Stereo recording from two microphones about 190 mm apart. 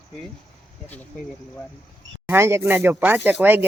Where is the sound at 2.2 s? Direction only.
15° right (ahead or behind).